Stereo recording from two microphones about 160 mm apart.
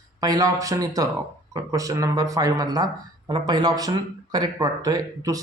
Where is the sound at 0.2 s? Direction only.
25° right (ahead or behind).